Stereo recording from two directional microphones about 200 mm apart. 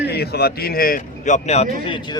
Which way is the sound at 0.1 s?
55° left (ahead or behind).